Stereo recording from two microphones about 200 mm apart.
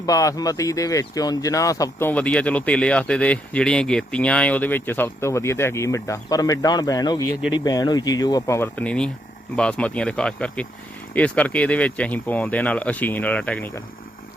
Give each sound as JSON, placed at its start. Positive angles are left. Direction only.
{"t": 0.0, "sound": "speech", "side_deg": 15}